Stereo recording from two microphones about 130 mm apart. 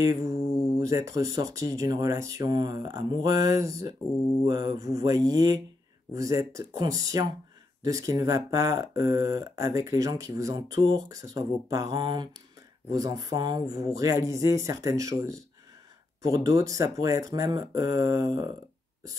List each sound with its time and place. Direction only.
0.0 s mantra: 25° right (ahead or behind)
0.7 s speech: 25° right (ahead or behind)